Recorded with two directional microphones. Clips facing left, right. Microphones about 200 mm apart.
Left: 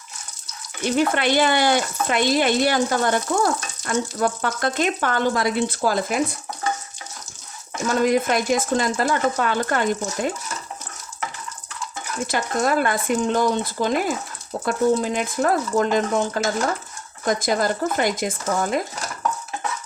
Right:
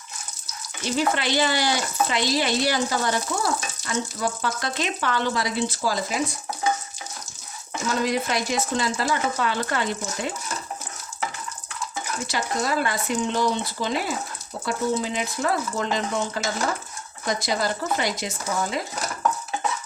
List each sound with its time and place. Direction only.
0.9 s speech: 55° left (ahead or behind)
8.0 s speech: 50° left (ahead or behind)
12.3 s speech: 50° left (ahead or behind)